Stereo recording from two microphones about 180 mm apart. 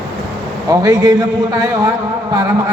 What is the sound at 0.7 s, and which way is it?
Speech, 20° right (ahead or behind).